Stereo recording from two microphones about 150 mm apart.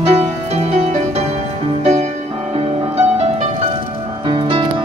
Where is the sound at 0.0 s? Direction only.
45° right (ahead or behind).